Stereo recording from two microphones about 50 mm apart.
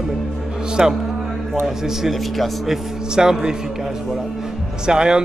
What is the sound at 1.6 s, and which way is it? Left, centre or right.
A man's voice, centre.